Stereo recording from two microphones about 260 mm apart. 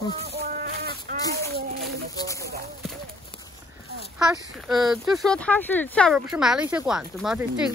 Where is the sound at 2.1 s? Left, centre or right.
Centre.